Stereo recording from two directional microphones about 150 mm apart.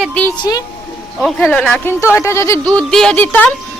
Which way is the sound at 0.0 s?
10° left (ahead or behind).